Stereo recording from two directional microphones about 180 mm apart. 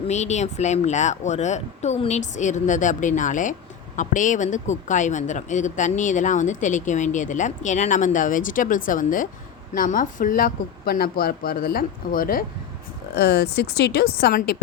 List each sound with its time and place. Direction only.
0.1 s speech: 40° left (ahead or behind)
13.1 s a woman's voice: 65° left (ahead or behind)